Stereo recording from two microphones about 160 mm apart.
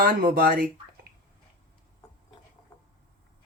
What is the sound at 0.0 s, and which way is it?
Speech, 70° right (ahead or behind).